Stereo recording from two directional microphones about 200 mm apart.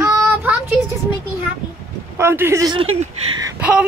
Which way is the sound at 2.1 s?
10° right (ahead or behind).